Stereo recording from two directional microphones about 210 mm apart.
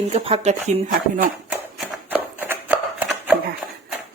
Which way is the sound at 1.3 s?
Centre (ahead or behind).